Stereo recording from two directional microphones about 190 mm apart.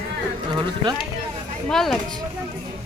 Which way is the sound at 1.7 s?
Centre (ahead or behind).